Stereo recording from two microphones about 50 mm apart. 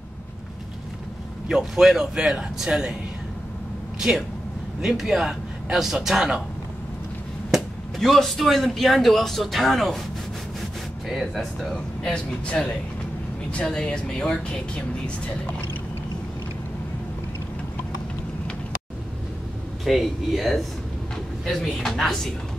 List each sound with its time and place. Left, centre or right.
1.5 s a man's voice: centre
4.8 s a man's voice: centre
7.5 s speech: centre
11.1 s speech: centre
11.7 s speech: left
19.8 s speech: centre